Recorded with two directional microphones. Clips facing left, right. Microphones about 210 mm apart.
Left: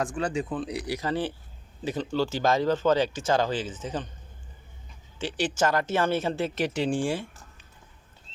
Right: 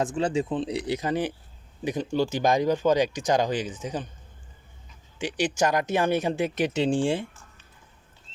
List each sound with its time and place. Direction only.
0.0 s speech: 20° right (ahead or behind)
5.2 s speech: 15° right (ahead or behind)